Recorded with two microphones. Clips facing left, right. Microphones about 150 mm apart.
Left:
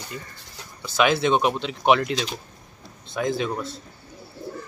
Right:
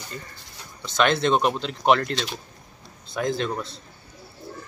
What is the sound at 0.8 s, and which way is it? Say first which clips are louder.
Speech: left 1 dB; 5° left (ahead or behind).